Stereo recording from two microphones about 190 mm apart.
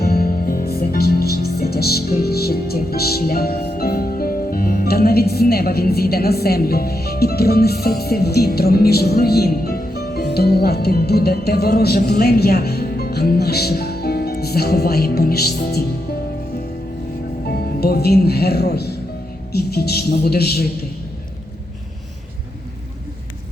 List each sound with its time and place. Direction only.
0.0 s music: 50° left (ahead or behind)
17.4 s a man's voice: 55° left (ahead or behind)